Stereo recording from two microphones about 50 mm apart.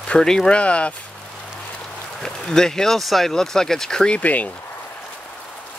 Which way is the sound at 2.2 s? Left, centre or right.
Centre.